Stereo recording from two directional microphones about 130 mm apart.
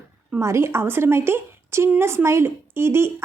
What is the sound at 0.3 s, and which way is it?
A woman's voice, 20° right (ahead or behind).